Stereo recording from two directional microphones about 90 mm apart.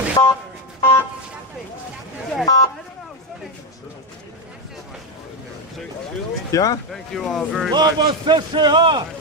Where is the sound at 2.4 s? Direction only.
45° left (ahead or behind).